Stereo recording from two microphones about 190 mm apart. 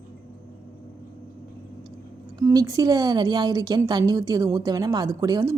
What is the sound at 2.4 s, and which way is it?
Speech, 15° right (ahead or behind).